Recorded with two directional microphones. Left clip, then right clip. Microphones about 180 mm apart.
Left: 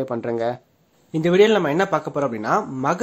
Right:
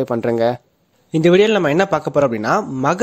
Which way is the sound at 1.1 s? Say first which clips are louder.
Right 3 dB; 40° right (ahead or behind).